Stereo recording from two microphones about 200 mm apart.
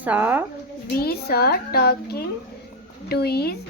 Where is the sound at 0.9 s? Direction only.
50° left (ahead or behind).